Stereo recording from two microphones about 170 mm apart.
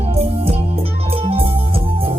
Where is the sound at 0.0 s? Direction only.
35° right (ahead or behind).